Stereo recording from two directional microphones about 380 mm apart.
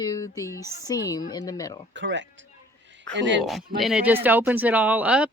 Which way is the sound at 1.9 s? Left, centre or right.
Right.